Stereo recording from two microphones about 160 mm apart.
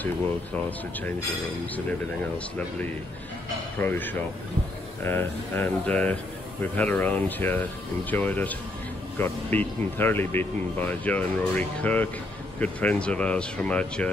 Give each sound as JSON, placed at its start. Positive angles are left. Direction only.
{"t": 3.8, "sound": "speech", "side_deg": 10}